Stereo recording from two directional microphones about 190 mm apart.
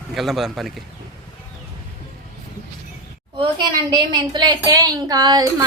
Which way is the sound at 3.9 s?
25° right (ahead or behind).